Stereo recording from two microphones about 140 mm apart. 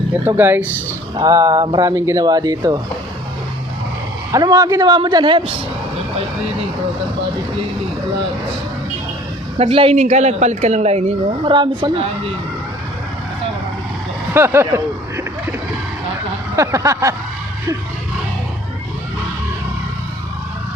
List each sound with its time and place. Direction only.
0.1 s speech: 15° right (ahead or behind)
1.1 s speech: 25° right (ahead or behind)
4.3 s speech: 25° right (ahead or behind)
9.6 s a woman's voice: 45° right (ahead or behind)
11.4 s speech: 35° right (ahead or behind)
14.3 s a sound: 20° right (ahead or behind)
16.6 s speech: 20° right (ahead or behind)